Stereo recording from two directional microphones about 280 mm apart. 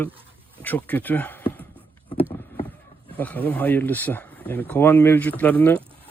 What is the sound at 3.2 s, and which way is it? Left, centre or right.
Speech, centre.